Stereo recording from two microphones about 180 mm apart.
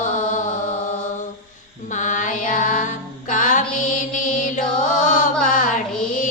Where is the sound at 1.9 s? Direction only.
45° left (ahead or behind).